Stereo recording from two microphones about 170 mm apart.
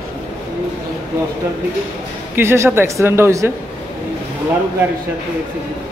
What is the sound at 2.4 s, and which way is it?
Speech, 15° right (ahead or behind).